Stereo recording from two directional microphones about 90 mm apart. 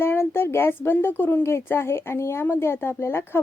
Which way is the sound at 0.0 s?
25° left (ahead or behind).